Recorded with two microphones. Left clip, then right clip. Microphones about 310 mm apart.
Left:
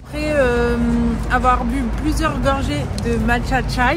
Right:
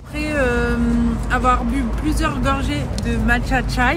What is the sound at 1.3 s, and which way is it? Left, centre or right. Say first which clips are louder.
A woman's voice: left 1 dB; centre.